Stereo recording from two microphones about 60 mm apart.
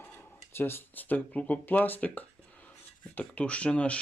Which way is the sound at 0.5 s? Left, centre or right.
Left.